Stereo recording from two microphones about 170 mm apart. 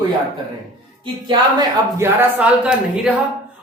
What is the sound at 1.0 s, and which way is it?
Speech, 25° right (ahead or behind).